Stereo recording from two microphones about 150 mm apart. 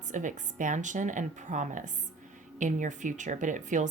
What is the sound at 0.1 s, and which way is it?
Speech, 55° right (ahead or behind).